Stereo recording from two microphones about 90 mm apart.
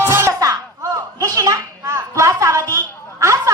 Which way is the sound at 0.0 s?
30° right (ahead or behind).